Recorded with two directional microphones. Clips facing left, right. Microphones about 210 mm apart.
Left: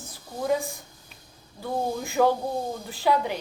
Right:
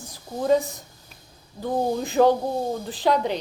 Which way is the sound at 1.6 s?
20° right (ahead or behind).